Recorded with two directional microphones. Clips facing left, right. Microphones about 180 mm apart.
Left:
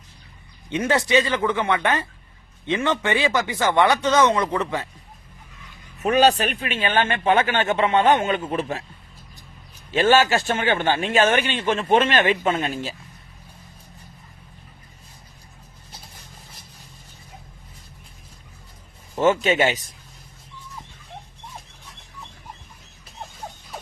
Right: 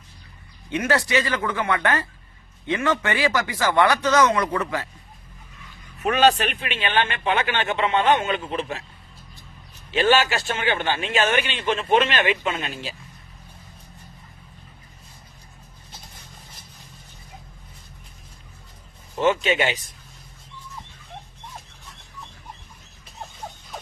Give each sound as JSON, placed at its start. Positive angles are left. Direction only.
{"t": 0.7, "sound": "speech", "side_deg": 20}
{"t": 6.0, "sound": "a man's voice", "side_deg": 35}
{"t": 9.9, "sound": "a man's voice", "side_deg": 45}
{"t": 19.2, "sound": "a man's voice", "side_deg": 45}